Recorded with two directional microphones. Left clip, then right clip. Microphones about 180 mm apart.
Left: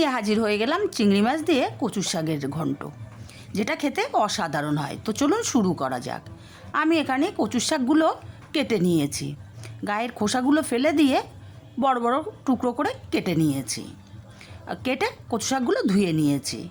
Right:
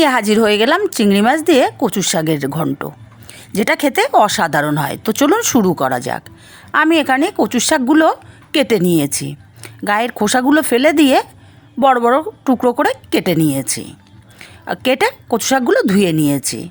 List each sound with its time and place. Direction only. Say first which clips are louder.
0.0 s a woman's voice: right 11 dB; 40° right (ahead or behind)